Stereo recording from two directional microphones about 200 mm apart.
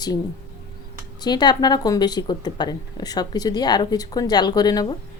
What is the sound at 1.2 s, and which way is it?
Speech, 20° left (ahead or behind).